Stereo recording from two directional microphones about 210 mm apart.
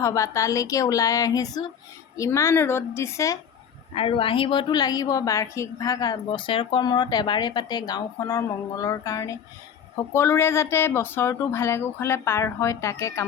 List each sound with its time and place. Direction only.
0.0 s speech: 15° left (ahead or behind)
3.9 s a woman's voice: 25° left (ahead or behind)